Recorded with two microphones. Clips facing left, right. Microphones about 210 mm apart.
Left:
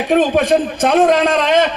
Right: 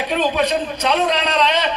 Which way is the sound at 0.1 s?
50° left (ahead or behind).